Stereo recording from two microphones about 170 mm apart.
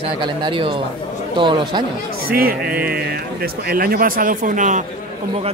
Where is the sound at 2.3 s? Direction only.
60° right (ahead or behind).